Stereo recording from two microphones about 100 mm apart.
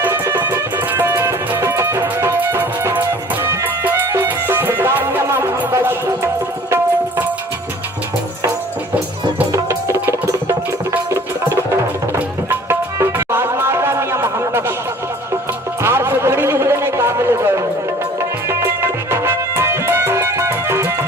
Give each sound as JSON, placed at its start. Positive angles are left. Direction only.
{"t": 0.0, "sound": "music", "side_deg": -20}
{"t": 9.5, "sound": "music", "side_deg": -30}
{"t": 15.8, "sound": "a sound", "side_deg": -25}
{"t": 18.2, "sound": "music", "side_deg": -25}